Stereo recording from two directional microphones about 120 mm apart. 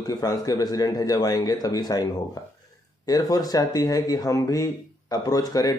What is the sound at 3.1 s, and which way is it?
Speech, 30° left (ahead or behind).